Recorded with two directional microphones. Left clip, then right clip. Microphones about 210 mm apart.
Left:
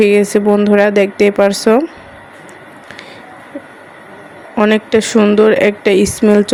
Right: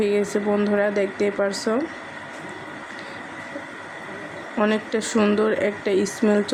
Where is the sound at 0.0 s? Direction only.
40° left (ahead or behind).